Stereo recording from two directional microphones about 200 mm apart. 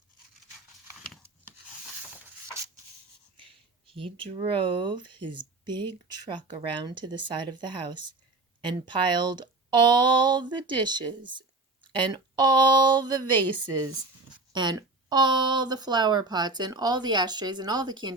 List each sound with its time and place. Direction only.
3.3 s speech: 25° right (ahead or behind)
14.5 s speech: 20° right (ahead or behind)